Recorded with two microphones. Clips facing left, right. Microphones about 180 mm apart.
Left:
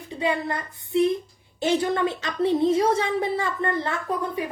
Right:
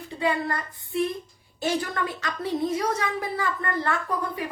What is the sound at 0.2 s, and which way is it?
A woman's voice, 20° left (ahead or behind).